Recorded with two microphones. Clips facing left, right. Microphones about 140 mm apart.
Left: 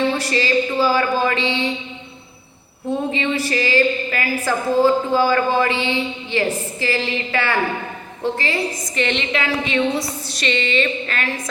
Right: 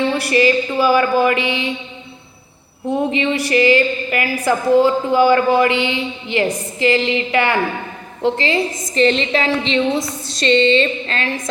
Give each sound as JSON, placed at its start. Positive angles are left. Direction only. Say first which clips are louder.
{"t": 0.2, "sound": "a woman's voice", "louder": "right 4 dB", "side_deg": -15}
{"t": 3.1, "sound": "a woman's voice", "louder": "right 4 dB", "side_deg": -15}
{"t": 9.0, "sound": "a woman's voice", "louder": "right 7 dB", "side_deg": -35}